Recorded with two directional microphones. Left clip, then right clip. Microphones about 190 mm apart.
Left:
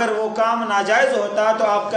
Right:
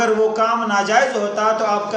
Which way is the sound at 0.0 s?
15° left (ahead or behind).